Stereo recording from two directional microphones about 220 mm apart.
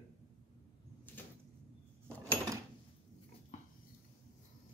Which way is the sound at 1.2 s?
10° left (ahead or behind).